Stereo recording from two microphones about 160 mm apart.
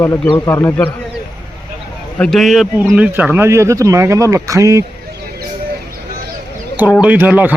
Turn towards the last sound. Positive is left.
turn(degrees=-10)  # may be behind; listen again after turning